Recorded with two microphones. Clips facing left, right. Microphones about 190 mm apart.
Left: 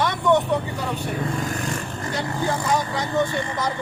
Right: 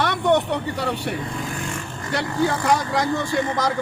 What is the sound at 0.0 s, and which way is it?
Speech, 65° right (ahead or behind).